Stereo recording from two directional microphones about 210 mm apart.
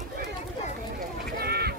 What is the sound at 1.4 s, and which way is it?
Duck, 50° right (ahead or behind).